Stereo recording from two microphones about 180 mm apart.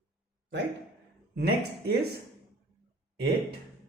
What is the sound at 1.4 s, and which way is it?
Speech, 65° right (ahead or behind).